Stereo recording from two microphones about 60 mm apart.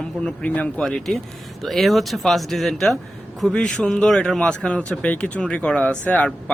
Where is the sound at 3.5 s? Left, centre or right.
Centre.